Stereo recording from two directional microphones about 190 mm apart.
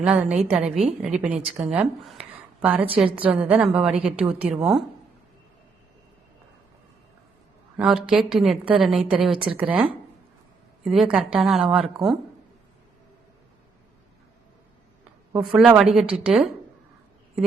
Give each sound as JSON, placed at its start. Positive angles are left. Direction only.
{"t": 0.0, "sound": "a woman's voice", "side_deg": -5}
{"t": 7.8, "sound": "a woman's voice", "side_deg": -5}
{"t": 9.3, "sound": "speech", "side_deg": -25}
{"t": 9.6, "sound": "a woman's voice", "side_deg": -10}
{"t": 15.3, "sound": "a woman's voice", "side_deg": -5}